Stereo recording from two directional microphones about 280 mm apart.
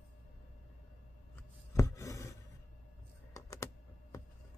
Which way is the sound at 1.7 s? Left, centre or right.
Centre.